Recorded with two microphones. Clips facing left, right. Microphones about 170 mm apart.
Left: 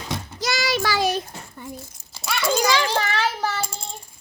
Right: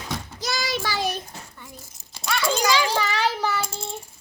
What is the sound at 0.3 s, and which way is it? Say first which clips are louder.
Child singing: left 5 dB; 85° left.